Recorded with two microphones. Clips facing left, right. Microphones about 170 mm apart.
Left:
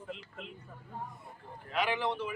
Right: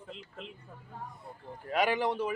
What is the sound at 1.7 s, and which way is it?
Speech, 40° right (ahead or behind).